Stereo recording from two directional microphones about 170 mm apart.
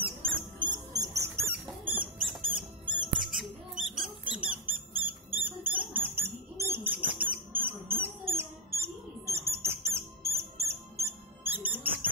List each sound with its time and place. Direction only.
0.0 s rodents: 30° right (ahead or behind)
11.5 s mouse: 10° right (ahead or behind)